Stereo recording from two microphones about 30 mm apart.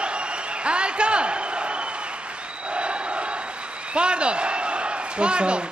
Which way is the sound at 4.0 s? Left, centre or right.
Right.